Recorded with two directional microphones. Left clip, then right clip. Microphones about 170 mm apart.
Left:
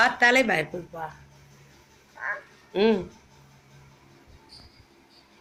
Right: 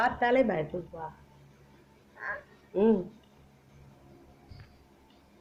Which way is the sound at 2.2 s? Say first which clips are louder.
Left 6 dB; 5° right (ahead or behind).